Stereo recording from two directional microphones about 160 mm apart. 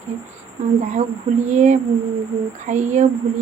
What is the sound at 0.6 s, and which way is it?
Speech, 45° right (ahead or behind).